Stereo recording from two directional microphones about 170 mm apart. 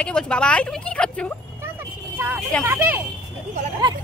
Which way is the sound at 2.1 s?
10° right (ahead or behind).